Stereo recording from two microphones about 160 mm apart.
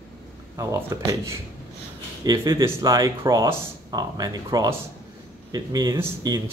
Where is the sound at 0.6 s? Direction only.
20° right (ahead or behind).